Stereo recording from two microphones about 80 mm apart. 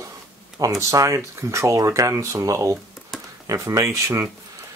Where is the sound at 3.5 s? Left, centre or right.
Right.